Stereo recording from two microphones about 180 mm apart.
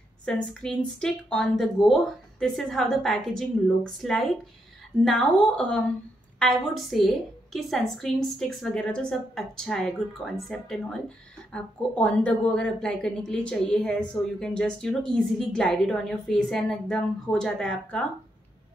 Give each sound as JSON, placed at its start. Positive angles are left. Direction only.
{"t": 0.2, "sound": "a woman's voice", "side_deg": 5}